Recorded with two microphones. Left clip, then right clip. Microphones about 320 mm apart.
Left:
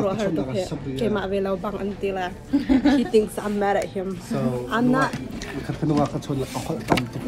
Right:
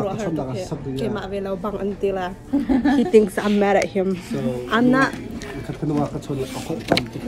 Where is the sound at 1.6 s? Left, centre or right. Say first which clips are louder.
Right 3 dB; centre.